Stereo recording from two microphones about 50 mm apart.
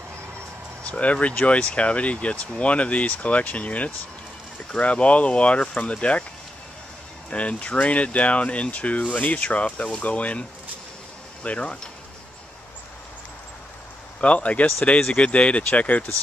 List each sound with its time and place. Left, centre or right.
0.8 s speech: left
7.2 s speech: left
11.4 s speech: left
14.2 s speech: left